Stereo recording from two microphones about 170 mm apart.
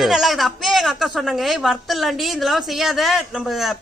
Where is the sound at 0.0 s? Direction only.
Centre (ahead or behind).